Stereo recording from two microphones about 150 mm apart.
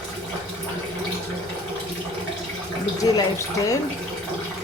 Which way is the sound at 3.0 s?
20° left (ahead or behind).